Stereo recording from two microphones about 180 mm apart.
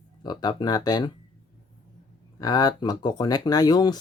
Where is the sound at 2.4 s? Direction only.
20° left (ahead or behind).